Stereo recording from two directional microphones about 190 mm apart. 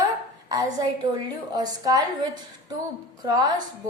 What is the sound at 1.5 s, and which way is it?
A woman's voice, 20° right (ahead or behind).